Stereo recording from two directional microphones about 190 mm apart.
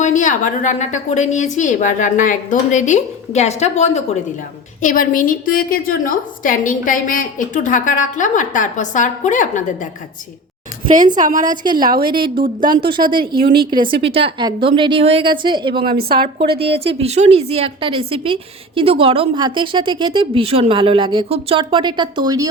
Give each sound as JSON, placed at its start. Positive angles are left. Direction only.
{"t": 0.0, "sound": "a woman's voice", "side_deg": 40}
{"t": 11.6, "sound": "a woman's voice", "side_deg": -25}
{"t": 11.9, "sound": "a woman's voice", "side_deg": -55}
{"t": 12.5, "sound": "a woman's voice", "side_deg": -25}
{"t": 13.3, "sound": "a woman's voice", "side_deg": -55}
{"t": 13.7, "sound": "a woman's voice", "side_deg": -25}
{"t": 15.9, "sound": "a woman's voice", "side_deg": -55}
{"t": 17.0, "sound": "a woman's voice", "side_deg": -35}